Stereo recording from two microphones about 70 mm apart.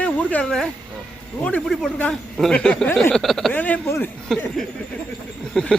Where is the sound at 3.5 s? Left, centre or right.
Left.